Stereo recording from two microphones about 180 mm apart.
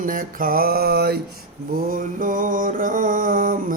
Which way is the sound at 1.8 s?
50° right (ahead or behind).